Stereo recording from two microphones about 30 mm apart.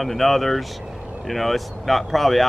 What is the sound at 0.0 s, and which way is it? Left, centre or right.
Speech, centre.